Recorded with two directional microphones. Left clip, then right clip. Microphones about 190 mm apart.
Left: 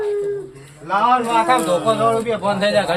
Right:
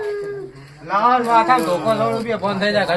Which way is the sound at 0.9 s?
25° left (ahead or behind).